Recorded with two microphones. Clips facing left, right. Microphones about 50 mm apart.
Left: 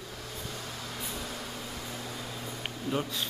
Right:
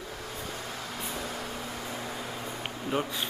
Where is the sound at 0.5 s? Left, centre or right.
Centre.